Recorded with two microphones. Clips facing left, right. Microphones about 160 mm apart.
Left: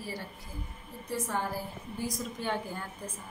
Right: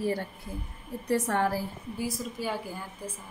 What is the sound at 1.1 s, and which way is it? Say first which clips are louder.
Speech: right 7 dB; 70° right (ahead or behind).